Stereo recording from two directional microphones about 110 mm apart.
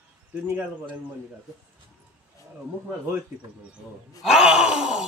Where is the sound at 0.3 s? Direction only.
15° right (ahead or behind).